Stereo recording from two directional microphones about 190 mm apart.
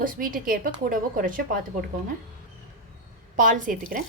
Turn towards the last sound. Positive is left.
turn(degrees=-45)  # may be behind; listen again after turning